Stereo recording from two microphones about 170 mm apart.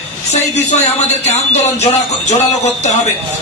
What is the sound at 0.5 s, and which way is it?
Speech, 40° left (ahead or behind).